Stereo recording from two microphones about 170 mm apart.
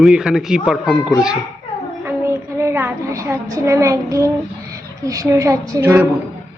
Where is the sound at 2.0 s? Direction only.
15° right (ahead or behind).